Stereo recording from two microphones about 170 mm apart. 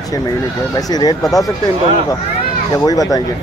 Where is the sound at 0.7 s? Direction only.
20° left (ahead or behind).